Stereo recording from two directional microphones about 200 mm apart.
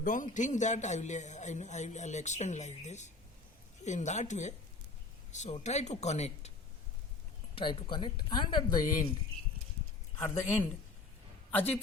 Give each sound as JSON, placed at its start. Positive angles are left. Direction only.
{"t": 0.0, "sound": "a man's voice", "side_deg": 40}
{"t": 7.5, "sound": "speech", "side_deg": 25}
{"t": 10.2, "sound": "speech", "side_deg": 15}
{"t": 11.5, "sound": "a man's voice", "side_deg": 10}